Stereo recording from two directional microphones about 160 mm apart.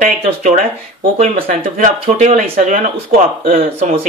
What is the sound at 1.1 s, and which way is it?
Speech, 55° right (ahead or behind).